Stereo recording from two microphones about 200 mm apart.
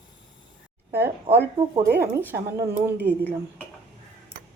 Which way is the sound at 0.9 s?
10° right (ahead or behind).